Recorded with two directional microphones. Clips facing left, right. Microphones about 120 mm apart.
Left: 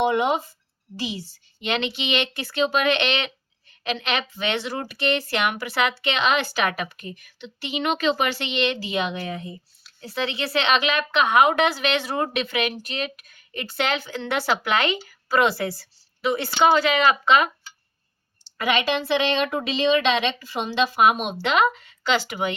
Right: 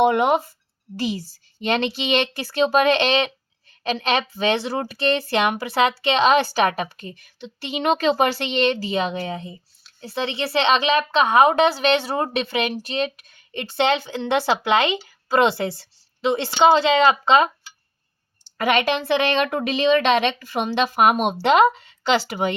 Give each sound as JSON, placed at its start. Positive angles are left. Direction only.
{"t": 0.0, "sound": "a woman's voice", "side_deg": -55}
{"t": 18.5, "sound": "a woman's voice", "side_deg": -50}
{"t": 21.4, "sound": "a woman's voice", "side_deg": -35}